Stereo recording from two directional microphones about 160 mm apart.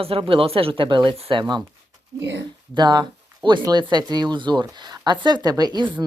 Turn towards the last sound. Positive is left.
turn(degrees=-30)  # may be behind; listen again after turning